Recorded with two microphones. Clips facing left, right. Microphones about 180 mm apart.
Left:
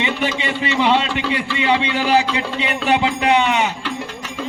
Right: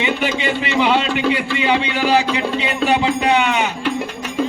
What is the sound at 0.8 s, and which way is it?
Speech, 25° left (ahead or behind).